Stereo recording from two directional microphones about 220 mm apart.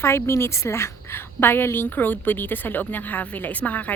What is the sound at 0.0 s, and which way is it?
A woman's voice, 10° left (ahead or behind).